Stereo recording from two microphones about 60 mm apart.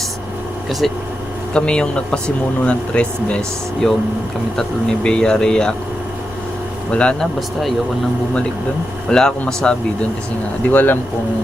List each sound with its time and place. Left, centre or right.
0.8 s speech: centre
1.5 s speech: centre
6.9 s speech: centre
9.0 s speech: centre
10.7 s speech: left